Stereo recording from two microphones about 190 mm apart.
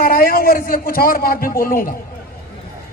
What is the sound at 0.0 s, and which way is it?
A man's voice, 50° left (ahead or behind).